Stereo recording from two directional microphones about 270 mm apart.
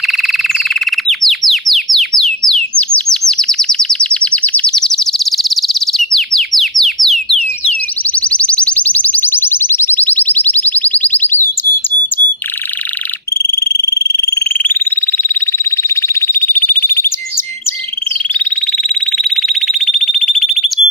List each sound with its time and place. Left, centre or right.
1.0 s bird: centre
8.1 s synthesizer: centre
13.7 s frog: centre
15.9 s alarm: centre
19.1 s smoke detector: centre